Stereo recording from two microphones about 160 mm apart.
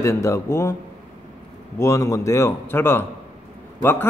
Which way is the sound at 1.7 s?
20° left (ahead or behind).